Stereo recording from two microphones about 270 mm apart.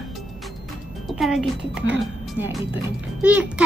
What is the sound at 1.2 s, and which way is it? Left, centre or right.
Child singing, centre.